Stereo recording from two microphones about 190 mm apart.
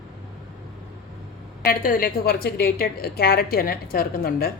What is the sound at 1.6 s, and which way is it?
A woman's voice, 50° left (ahead or behind).